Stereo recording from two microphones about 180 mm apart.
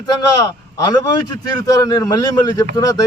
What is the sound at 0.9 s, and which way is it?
A man's voice, 20° left (ahead or behind).